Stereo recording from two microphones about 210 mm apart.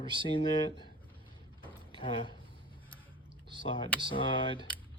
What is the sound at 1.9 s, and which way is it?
Speech, 25° left (ahead or behind).